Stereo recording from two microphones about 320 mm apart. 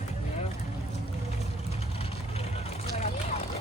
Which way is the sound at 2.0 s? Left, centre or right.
Centre.